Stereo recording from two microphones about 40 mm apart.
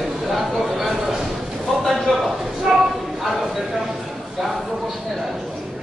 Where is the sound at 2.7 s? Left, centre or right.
Right.